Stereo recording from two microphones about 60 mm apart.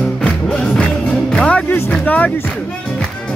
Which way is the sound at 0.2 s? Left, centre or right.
Centre.